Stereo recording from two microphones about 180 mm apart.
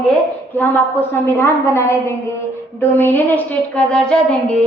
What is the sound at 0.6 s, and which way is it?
A woman's voice, 15° left (ahead or behind).